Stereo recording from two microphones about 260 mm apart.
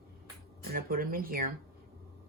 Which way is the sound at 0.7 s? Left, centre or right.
Right.